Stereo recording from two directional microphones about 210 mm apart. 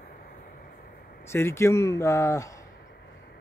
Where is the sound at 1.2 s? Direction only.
10° left (ahead or behind).